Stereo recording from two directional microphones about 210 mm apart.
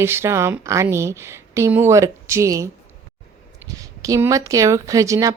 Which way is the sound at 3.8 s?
15° right (ahead or behind).